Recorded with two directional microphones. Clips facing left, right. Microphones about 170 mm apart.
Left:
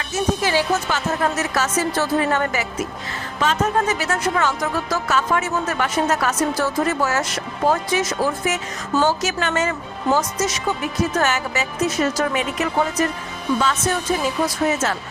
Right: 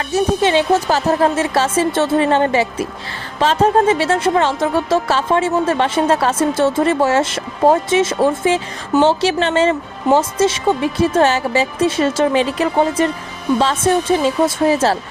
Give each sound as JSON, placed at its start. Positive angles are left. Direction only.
{"t": 0.1, "sound": "speech", "side_deg": -25}